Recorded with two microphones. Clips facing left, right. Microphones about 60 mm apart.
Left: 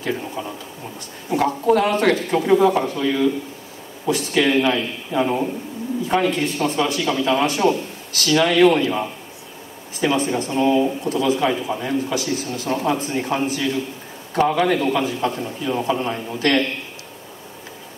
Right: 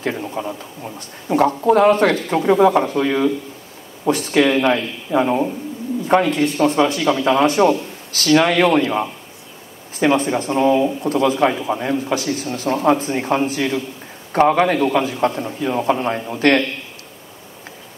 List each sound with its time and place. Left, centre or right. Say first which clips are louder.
0.0 s speech: right 2 dB; right